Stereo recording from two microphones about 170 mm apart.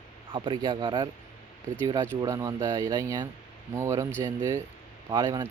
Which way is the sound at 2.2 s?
20° right (ahead or behind).